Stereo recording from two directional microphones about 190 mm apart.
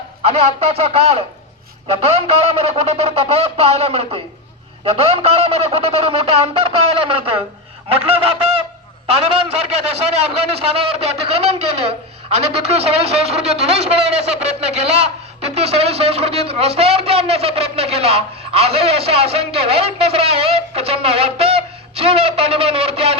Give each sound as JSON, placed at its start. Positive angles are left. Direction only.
{"t": 0.2, "sound": "a man's voice", "side_deg": -35}